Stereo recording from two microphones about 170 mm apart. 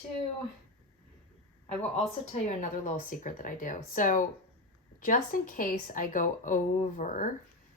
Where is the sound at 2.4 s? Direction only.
50° left (ahead or behind).